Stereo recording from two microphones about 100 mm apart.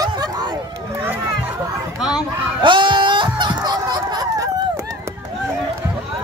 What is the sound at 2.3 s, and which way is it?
Snicker, 55° right (ahead or behind).